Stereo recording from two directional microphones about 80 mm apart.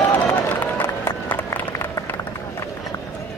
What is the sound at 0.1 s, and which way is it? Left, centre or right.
Run, left.